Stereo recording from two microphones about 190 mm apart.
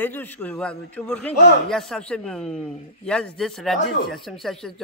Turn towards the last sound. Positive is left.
turn(degrees=0)  # may be behind; listen again after turning